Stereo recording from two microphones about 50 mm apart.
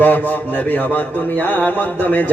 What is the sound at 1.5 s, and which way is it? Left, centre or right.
Speech, left.